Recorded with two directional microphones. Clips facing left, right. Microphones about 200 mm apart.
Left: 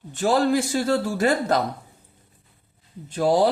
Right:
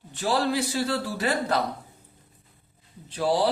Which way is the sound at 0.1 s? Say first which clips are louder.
Left 5 dB; 45° left (ahead or behind).